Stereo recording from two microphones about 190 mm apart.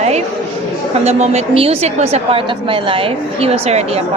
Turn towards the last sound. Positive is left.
turn(degrees=-35)  # may be behind; listen again after turning